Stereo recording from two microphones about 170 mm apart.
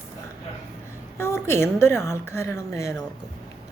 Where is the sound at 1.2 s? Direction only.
15° left (ahead or behind).